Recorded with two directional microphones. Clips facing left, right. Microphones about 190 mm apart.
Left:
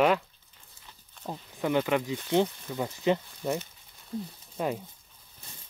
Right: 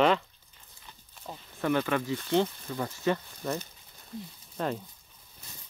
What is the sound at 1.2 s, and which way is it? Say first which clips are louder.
Speech: left 5 dB; 65° left (ahead or behind).